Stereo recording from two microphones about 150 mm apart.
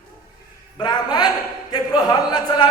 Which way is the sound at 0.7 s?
30° left (ahead or behind).